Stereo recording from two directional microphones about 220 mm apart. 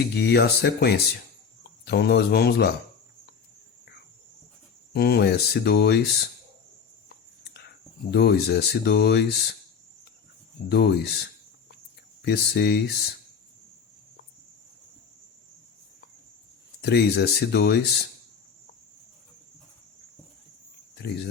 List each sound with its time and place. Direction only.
0.0 s speech: 45° left (ahead or behind)
4.9 s speech: 45° left (ahead or behind)
7.1 s a sound: 45° left (ahead or behind)
8.1 s speech: 50° left (ahead or behind)
10.7 s speech: 50° left (ahead or behind)
12.2 s speech: 50° left (ahead or behind)
16.8 s speech: 50° left (ahead or behind)